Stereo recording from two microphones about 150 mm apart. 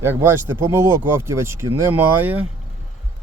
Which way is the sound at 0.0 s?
15° right (ahead or behind).